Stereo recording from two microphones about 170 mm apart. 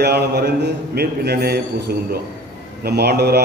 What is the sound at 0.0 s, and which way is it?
A man's voice, 70° right (ahead or behind).